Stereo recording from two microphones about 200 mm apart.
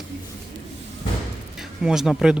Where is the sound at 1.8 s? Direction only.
5° right (ahead or behind).